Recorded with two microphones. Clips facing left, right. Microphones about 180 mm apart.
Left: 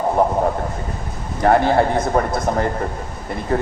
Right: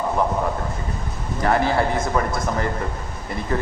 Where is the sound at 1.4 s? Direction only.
35° left (ahead or behind).